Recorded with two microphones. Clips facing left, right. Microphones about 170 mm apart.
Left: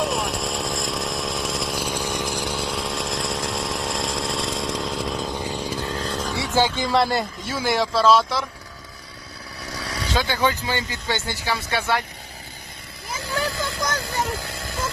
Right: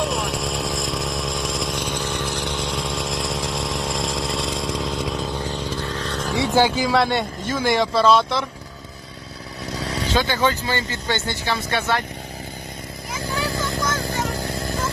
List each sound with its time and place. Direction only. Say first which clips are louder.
0.0 s chainsaw: even; centre (ahead or behind)
5.3 s chainsaw: right 1 dB; 10° left (ahead or behind)
5.9 s vehicle: even; 35° left (ahead or behind)
6.3 s speech: right 4 dB; 15° right (ahead or behind); by 8.4 s centre (ahead or behind)
10.2 s speech: right 1 dB; 10° left (ahead or behind)
14.1 s vehicle: right 2 dB; 40° right (ahead or behind)